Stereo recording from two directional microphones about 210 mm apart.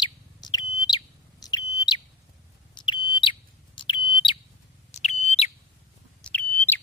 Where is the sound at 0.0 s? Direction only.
20° left (ahead or behind).